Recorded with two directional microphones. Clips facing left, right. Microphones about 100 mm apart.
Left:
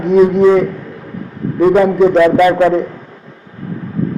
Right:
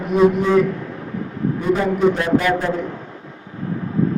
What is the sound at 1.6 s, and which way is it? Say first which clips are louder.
A man's voice: left 10 dB; 90° left.